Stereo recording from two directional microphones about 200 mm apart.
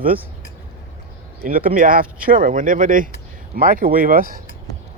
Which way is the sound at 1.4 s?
45° right (ahead or behind).